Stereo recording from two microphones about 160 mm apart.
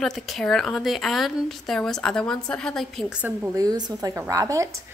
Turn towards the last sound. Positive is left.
turn(degrees=-20)  # may be behind; listen again after turning